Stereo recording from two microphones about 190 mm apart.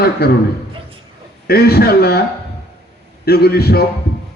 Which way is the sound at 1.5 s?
55° left (ahead or behind).